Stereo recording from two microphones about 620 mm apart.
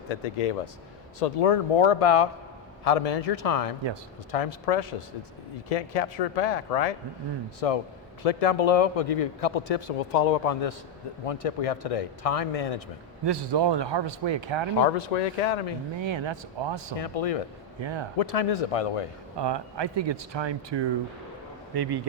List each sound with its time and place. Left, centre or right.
0.1 s speech: left
1.2 s speech: left
2.8 s a man's voice: left
7.6 s a man's voice: left
13.2 s a man's voice: right
14.8 s speech: left
16.0 s a man's voice: right
16.9 s speech: left
17.7 s speech: right
18.2 s speech: left
19.4 s speech: right